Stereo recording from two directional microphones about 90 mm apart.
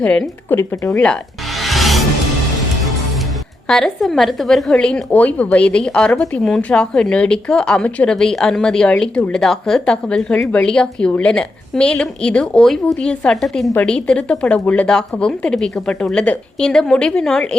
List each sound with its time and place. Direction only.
0.0 s a woman's voice: 10° left (ahead or behind)
0.5 s speech: 35° left (ahead or behind)
0.9 s music: 10° left (ahead or behind)
3.7 s a woman's voice: 5° left (ahead or behind)